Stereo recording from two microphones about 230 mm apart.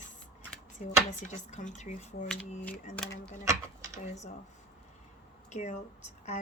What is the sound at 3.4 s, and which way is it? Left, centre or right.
Speech, centre.